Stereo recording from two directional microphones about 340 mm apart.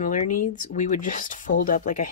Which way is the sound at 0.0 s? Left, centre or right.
Left.